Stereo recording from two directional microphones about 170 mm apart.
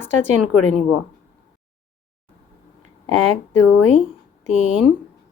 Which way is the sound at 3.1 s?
40° right (ahead or behind).